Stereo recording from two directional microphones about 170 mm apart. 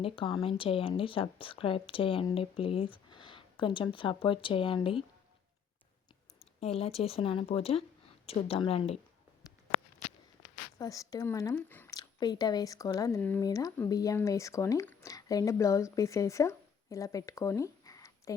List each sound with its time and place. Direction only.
0.0 s a woman's voice: 30° left (ahead or behind)
6.6 s a woman's voice: 35° left (ahead or behind)
10.8 s speech: 20° left (ahead or behind)
11.9 s speech: 25° left (ahead or behind)